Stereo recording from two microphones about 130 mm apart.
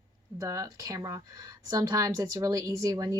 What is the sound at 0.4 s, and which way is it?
Speech, 25° right (ahead or behind).